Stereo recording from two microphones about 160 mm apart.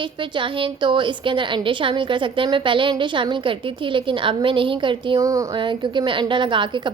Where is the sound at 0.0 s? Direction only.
30° right (ahead or behind).